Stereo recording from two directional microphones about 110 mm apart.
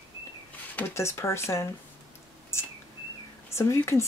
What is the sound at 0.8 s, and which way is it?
Speech, 20° left (ahead or behind).